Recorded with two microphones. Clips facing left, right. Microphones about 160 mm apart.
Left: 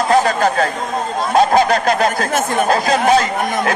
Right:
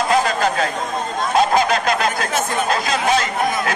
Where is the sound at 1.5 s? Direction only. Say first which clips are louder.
Left 4 dB; 35° left (ahead or behind).